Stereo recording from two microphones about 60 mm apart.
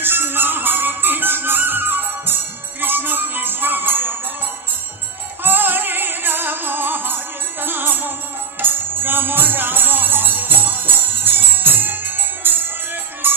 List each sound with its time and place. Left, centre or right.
0.0 s music: right
5.4 s music: right